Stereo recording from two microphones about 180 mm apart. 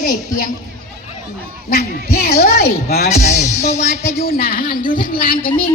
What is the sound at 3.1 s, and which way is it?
Music, 40° left (ahead or behind).